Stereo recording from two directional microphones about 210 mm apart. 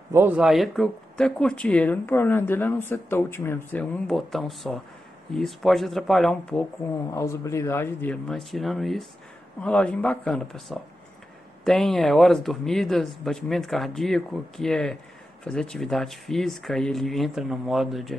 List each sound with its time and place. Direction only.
0.1 s speech: 10° right (ahead or behind)
7.1 s speech: 15° left (ahead or behind)